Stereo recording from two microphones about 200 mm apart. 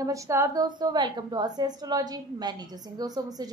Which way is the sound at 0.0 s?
15° right (ahead or behind).